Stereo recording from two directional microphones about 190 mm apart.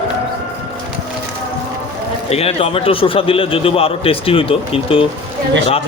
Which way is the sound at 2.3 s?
30° left (ahead or behind).